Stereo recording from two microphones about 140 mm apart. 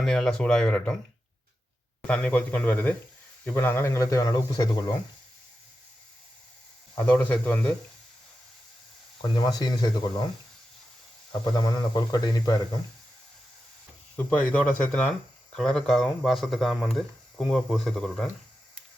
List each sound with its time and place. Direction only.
0.0 s speech: 5° left (ahead or behind)
2.0 s speech: 5° left (ahead or behind); by 4.9 s 25° left (ahead or behind)
7.1 s speech: 10° left (ahead or behind)
9.4 s speech: 30° left (ahead or behind)
11.3 s speech: 25° left (ahead or behind)
14.5 s speech: 10° left (ahead or behind)